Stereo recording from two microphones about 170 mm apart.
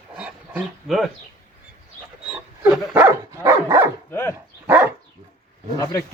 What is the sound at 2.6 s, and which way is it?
Dog, 15° right (ahead or behind).